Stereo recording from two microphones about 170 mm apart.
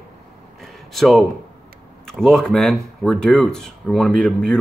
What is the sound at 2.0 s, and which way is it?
Speech, 5° left (ahead or behind).